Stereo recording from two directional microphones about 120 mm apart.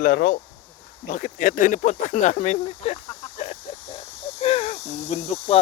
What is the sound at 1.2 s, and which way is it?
Speech, 90° left.